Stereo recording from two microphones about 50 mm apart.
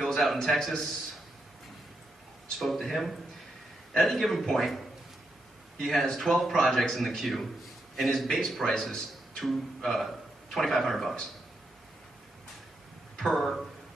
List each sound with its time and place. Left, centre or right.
0.0 s a man's voice: centre
2.6 s a man's voice: centre
5.8 s a man's voice: centre
13.1 s speech: centre